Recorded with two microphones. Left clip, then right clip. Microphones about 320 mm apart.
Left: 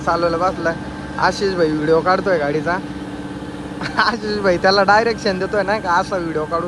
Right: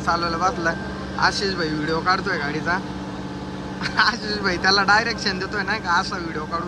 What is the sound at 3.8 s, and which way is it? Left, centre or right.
Speech, centre.